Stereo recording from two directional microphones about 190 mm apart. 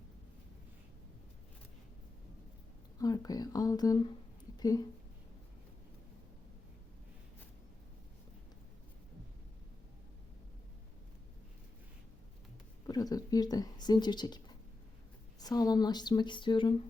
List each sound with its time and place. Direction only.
3.0 s speech: 20° left (ahead or behind)
12.9 s speech: 20° left (ahead or behind)